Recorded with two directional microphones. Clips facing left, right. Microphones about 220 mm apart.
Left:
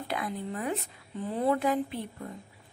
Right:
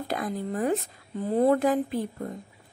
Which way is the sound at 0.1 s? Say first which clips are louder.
Right 4 dB; 40° right (ahead or behind).